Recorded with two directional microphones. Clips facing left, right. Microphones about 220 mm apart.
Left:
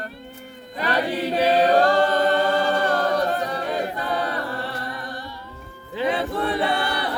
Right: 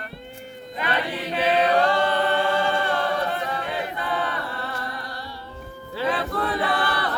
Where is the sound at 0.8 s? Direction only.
40° left (ahead or behind).